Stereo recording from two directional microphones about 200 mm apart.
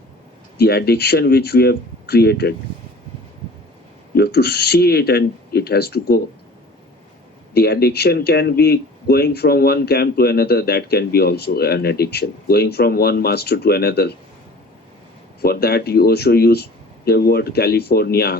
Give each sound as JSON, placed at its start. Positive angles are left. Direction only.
{"t": 0.6, "sound": "speech", "side_deg": 55}
{"t": 4.1, "sound": "speech", "side_deg": 55}
{"t": 7.5, "sound": "speech", "side_deg": 50}
{"t": 15.4, "sound": "speech", "side_deg": 50}